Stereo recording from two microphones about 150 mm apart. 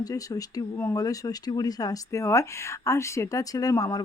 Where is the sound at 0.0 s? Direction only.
25° left (ahead or behind).